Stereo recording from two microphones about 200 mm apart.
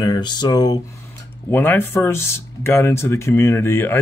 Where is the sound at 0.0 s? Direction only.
20° left (ahead or behind).